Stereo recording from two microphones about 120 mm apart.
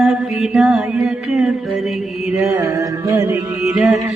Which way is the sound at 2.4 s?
30° right (ahead or behind).